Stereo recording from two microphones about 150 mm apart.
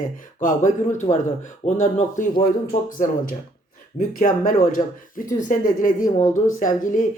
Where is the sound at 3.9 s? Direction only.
55° left (ahead or behind).